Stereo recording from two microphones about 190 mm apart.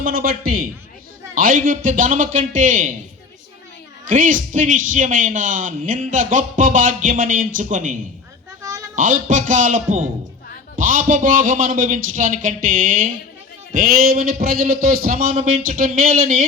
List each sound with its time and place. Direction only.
0.0 s a man's voice: 50° right (ahead or behind)
4.1 s a man's voice: 45° right (ahead or behind)
8.6 s a sound: 20° right (ahead or behind)
9.0 s a man's voice: 45° right (ahead or behind)